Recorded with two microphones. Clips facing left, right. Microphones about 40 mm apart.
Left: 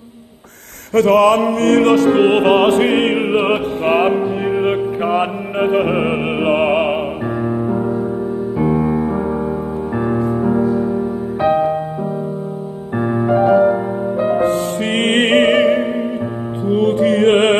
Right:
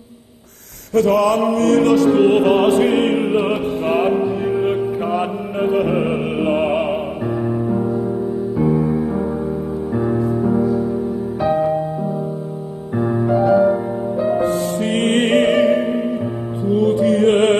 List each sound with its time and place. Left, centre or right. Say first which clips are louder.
0.9 s music: left 3 dB; left
12.9 s music: left 2 dB; left